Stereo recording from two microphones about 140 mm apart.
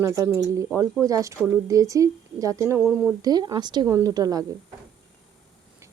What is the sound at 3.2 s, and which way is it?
Speech, 30° right (ahead or behind).